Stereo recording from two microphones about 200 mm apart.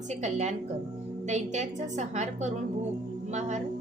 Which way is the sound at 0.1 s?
35° right (ahead or behind).